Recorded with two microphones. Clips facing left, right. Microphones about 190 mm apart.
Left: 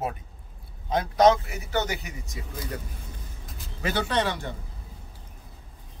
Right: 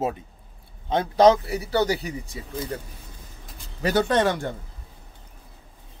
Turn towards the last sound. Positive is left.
turn(degrees=-50)  # may be behind; listen again after turning